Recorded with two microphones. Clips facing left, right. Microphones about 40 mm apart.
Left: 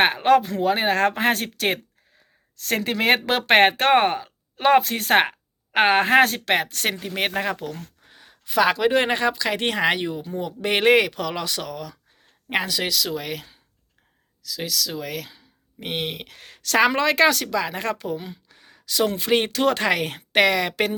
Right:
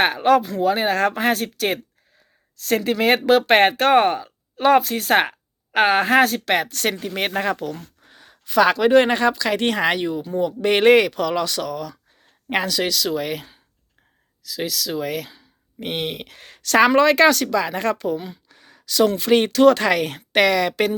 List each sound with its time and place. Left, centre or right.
0.0 s speech: left
4.8 s speech: left
5.0 s speech: left
7.0 s speech: centre
13.1 s speech: centre; by 20.9 s left